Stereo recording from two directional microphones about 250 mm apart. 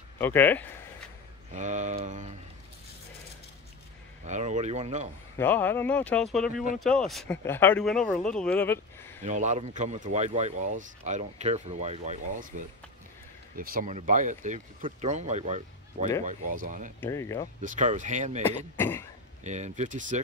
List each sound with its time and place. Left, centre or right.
0.2 s speech: centre
1.5 s speech: right
4.3 s speech: right
5.4 s speech: centre
9.2 s speech: right
17.0 s speech: centre
17.6 s speech: right
18.8 s cough: centre
19.4 s speech: right